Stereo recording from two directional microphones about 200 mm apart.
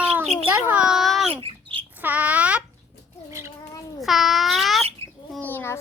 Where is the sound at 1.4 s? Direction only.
25° right (ahead or behind).